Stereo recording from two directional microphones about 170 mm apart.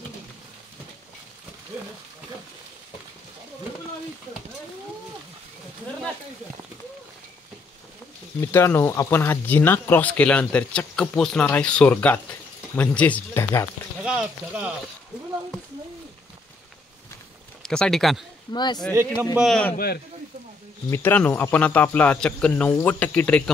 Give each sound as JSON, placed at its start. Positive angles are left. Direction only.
{"t": 8.4, "sound": "speech", "side_deg": 15}
{"t": 14.0, "sound": "speech", "side_deg": -5}
{"t": 17.6, "sound": "speech", "side_deg": 5}
{"t": 18.5, "sound": "speech", "side_deg": 25}
{"t": 19.3, "sound": "speech", "side_deg": 0}
{"t": 20.9, "sound": "speech", "side_deg": 15}